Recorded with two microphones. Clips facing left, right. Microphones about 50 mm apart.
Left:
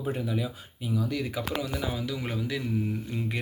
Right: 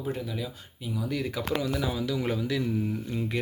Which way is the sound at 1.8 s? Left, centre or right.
Left.